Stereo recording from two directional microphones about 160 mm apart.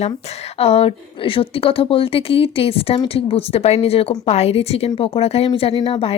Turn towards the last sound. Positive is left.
turn(degrees=40)  # may be behind; listen again after turning